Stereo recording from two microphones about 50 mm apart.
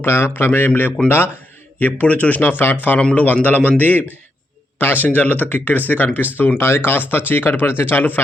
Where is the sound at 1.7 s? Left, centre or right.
Left.